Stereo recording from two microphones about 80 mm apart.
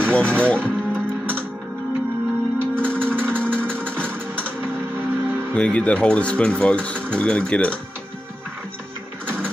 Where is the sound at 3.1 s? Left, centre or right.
Right.